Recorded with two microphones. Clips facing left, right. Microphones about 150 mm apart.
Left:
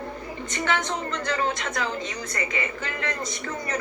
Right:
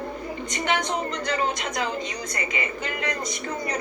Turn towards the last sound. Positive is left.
turn(degrees=-15)  # may be behind; listen again after turning